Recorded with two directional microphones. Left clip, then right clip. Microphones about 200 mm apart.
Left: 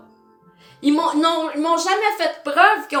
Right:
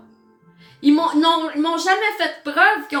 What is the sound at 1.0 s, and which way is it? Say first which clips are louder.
A woman's voice: right 1 dB; 5° right (ahead or behind).